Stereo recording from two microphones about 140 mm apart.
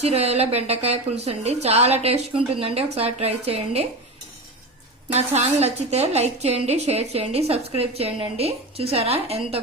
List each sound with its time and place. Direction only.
0.0 s a woman's voice: 45° right (ahead or behind)
5.1 s a woman's voice: 50° right (ahead or behind)